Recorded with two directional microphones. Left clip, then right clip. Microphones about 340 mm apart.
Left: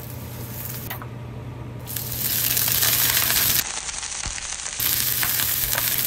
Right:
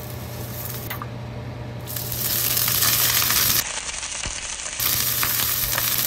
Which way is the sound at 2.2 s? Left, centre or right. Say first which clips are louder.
Right 1 dB; centre.